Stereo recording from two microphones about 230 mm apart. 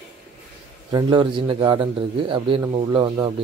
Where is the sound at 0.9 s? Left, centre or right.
Right.